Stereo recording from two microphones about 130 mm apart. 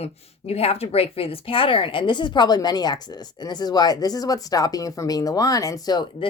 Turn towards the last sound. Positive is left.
turn(degrees=30)  # may be behind; listen again after turning